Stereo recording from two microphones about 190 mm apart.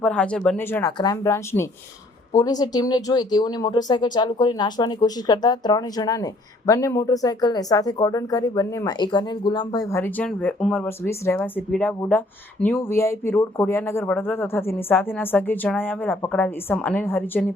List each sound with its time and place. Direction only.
0.0 s speech: 5° left (ahead or behind)